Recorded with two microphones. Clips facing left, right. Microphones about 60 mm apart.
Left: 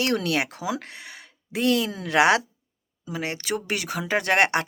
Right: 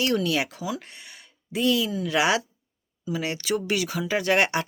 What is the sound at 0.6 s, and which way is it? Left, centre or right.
Speech, left.